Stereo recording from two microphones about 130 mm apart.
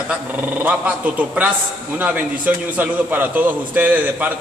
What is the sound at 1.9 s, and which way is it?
A man's voice, 10° right (ahead or behind).